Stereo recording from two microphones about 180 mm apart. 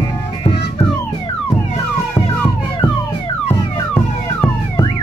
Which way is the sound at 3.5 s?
15° left (ahead or behind).